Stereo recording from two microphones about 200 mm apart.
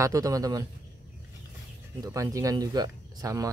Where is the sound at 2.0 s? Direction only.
15° right (ahead or behind).